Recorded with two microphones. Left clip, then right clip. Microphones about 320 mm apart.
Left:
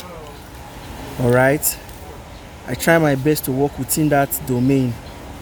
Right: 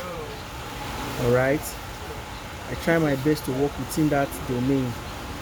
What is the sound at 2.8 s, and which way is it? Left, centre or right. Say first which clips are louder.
Speech: left 7 dB; left.